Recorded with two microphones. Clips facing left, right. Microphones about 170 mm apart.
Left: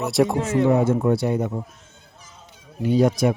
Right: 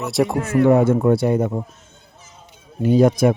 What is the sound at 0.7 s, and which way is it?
Speech, 60° right (ahead or behind).